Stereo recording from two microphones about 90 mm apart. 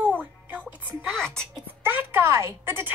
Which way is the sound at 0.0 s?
15° right (ahead or behind).